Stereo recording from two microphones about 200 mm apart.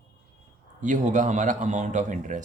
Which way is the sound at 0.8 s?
40° right (ahead or behind).